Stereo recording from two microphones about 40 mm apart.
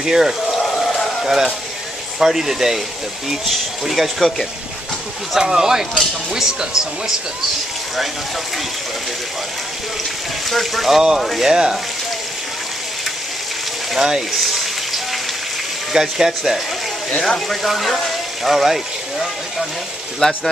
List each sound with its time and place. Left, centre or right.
0.0 s speech: centre
0.5 s a sound: centre
1.2 s speech: centre
5.3 s speech: centre
10.5 s speech: centre
11.4 s speech: centre
13.9 s speech: centre
14.3 s a sound: centre
15.9 s speech: centre
17.6 s speech: centre
20.2 s speech: centre